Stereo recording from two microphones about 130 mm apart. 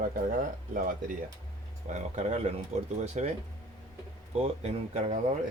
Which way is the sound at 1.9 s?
60° right (ahead or behind).